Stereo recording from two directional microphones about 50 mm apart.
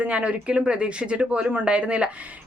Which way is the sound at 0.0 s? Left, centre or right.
Right.